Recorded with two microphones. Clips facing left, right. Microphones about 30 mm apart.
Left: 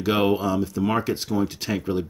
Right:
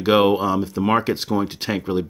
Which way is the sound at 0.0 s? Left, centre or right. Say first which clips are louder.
Right 5 dB; right.